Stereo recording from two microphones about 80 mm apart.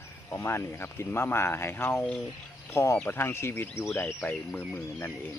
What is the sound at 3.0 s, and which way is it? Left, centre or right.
Speech, left.